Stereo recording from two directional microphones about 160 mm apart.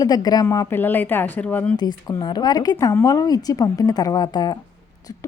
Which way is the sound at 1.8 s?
25° left (ahead or behind).